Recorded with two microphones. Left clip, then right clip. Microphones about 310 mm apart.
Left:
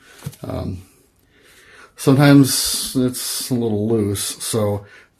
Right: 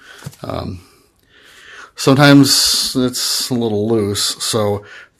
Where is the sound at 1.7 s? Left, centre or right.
Right.